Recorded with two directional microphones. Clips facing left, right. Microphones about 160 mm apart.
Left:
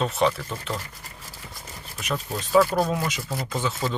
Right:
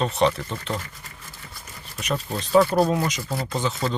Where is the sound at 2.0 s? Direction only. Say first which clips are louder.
Right 2 dB; 5° left (ahead or behind).